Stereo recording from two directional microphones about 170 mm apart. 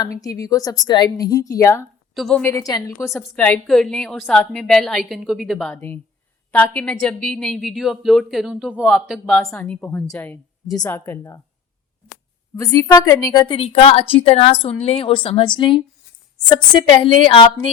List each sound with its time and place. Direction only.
0.0 s a woman's voice: 20° left (ahead or behind)
2.1 s a woman's voice: centre (ahead or behind)
2.4 s a woman's voice: 15° left (ahead or behind)
3.1 s a woman's voice: 10° left (ahead or behind)
12.5 s a woman's voice: 20° left (ahead or behind)
13.6 s a woman's voice: 35° left (ahead or behind)